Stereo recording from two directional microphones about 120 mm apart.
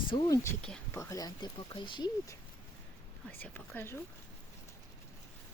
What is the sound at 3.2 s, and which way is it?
Speech, 15° left (ahead or behind).